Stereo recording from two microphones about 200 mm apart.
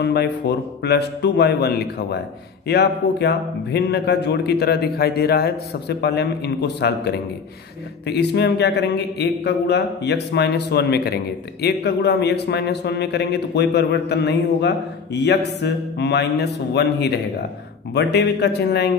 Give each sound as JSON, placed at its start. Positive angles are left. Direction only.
{"t": 0.0, "sound": "a man's voice", "side_deg": 55}